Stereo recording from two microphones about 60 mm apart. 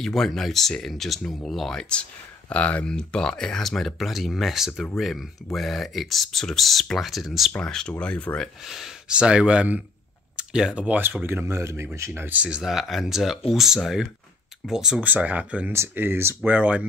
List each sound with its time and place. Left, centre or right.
0.0 s speech: centre
7.6 s speech: centre
8.6 s speech: centre
9.1 s speech: centre
11.2 s speech: right
12.1 s speech: right
12.4 s speech: centre
15.0 s speech: right
15.9 s speech: right
16.3 s speech: right